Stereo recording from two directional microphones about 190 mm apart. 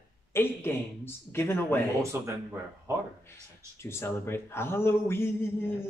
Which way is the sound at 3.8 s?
15° left (ahead or behind).